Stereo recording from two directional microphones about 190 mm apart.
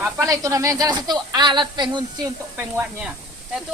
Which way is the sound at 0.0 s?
15° right (ahead or behind).